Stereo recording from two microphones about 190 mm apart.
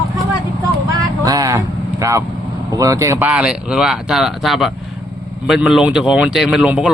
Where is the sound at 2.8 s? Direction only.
15° right (ahead or behind).